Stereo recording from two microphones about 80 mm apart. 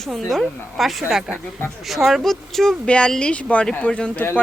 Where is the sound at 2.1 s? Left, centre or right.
Centre.